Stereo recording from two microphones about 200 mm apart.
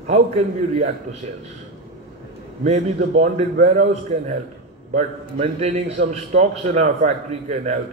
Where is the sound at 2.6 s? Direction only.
35° right (ahead or behind).